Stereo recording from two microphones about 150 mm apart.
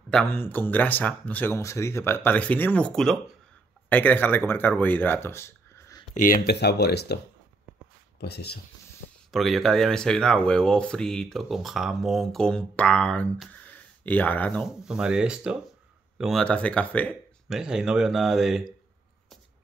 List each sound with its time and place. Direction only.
0.3 s speech: 15° left (ahead or behind)
6.1 s speech: 70° left (ahead or behind); by 7.2 s 90° left
8.2 s speech: 90° left
9.3 s speech: centre (ahead or behind)
13.7 s a sound: 10° left (ahead or behind)
14.6 s speech: 5° right (ahead or behind)
17.5 s speech: 5° right (ahead or behind)